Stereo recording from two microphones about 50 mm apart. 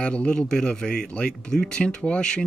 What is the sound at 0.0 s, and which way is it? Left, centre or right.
Speech, left.